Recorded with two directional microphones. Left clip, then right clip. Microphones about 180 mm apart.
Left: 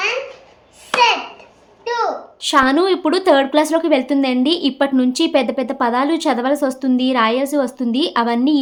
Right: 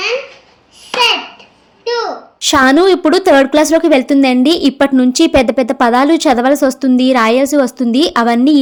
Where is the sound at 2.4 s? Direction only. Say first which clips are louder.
Right 6 dB; 40° right (ahead or behind).